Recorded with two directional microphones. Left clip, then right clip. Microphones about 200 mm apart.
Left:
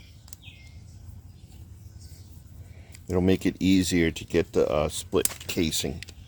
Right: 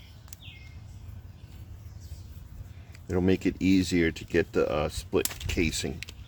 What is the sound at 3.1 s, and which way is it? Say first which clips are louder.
Speech: left 2 dB; 30° left (ahead or behind).